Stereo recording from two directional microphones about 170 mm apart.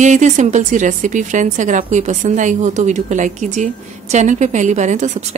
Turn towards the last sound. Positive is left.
turn(degrees=-45)  # may be behind; listen again after turning